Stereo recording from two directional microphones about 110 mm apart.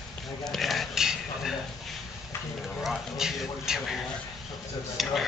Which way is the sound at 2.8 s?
Centre (ahead or behind).